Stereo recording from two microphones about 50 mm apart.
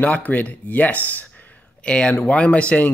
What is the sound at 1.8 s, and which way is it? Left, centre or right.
Speech, left.